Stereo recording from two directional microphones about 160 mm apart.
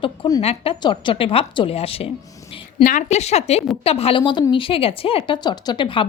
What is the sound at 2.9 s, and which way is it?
A woman's voice, 50° left (ahead or behind).